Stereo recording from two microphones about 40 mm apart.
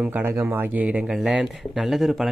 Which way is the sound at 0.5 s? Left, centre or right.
Right.